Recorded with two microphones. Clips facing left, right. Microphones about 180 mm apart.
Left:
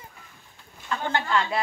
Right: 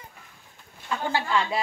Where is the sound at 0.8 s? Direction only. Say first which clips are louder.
Even; 10° right (ahead or behind).